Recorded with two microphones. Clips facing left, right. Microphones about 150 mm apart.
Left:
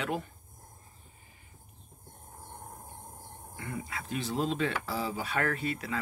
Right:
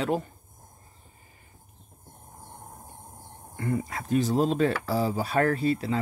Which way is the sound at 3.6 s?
40° right (ahead or behind).